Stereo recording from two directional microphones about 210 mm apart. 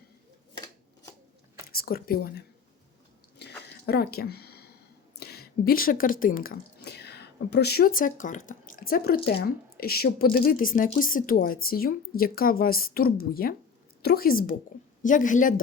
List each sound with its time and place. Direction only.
1.7 s speech: 45° left (ahead or behind)
3.4 s chewing: 55° left (ahead or behind)
3.8 s a woman's voice: 50° left (ahead or behind)